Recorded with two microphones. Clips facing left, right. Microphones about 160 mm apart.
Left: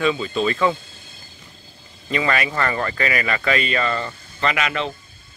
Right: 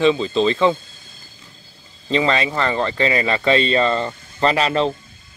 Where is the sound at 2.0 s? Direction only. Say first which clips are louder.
Right 3 dB; 25° right (ahead or behind).